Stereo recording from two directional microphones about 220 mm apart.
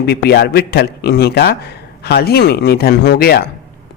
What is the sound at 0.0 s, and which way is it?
Speech, 45° left (ahead or behind).